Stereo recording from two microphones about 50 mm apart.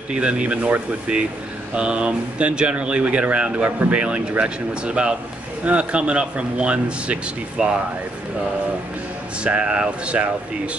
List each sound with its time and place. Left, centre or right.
0.1 s speech: right
9.4 s speech: right